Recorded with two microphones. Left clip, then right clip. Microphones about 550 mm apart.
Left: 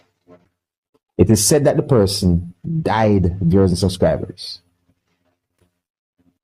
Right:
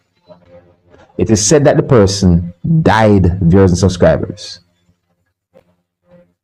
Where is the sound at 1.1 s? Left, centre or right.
Left.